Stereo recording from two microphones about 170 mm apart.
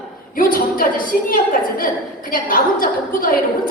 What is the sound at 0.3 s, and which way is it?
A woman's voice, 55° left (ahead or behind).